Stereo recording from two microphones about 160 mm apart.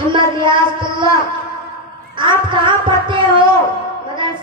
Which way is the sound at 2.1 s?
30° right (ahead or behind).